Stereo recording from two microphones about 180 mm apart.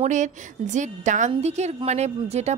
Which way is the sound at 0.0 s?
40° right (ahead or behind).